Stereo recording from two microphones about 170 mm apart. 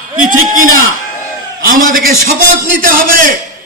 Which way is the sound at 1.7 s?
50° right (ahead or behind).